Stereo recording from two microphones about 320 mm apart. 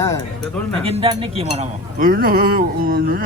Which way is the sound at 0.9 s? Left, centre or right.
Centre.